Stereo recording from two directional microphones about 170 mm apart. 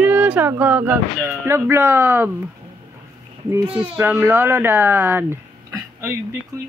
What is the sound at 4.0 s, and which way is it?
Speech, 10° right (ahead or behind).